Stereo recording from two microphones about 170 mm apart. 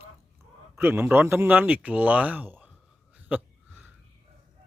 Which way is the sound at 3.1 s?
10° right (ahead or behind).